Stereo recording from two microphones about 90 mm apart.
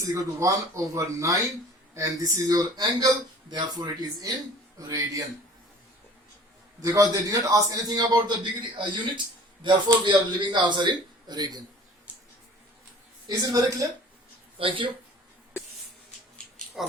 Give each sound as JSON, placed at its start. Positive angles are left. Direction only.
{"t": 0.0, "sound": "a man's voice", "side_deg": -40}
{"t": 6.8, "sound": "a man's voice", "side_deg": -40}
{"t": 8.7, "sound": "a man's voice", "side_deg": -60}
{"t": 13.2, "sound": "a man's voice", "side_deg": -45}
{"t": 14.6, "sound": "speech", "side_deg": -70}
{"t": 16.8, "sound": "speech", "side_deg": -5}